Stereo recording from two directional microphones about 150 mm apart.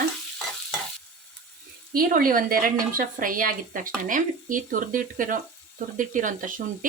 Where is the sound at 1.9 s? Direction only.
70° right (ahead or behind).